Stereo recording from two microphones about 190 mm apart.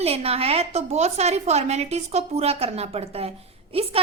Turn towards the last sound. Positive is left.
turn(degrees=-30)  # may be behind; listen again after turning